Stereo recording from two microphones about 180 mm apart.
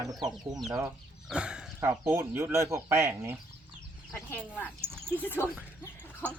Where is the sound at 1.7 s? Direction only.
15° right (ahead or behind).